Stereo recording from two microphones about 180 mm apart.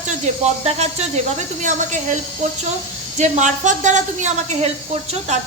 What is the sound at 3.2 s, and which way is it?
A woman's voice, 40° right (ahead or behind).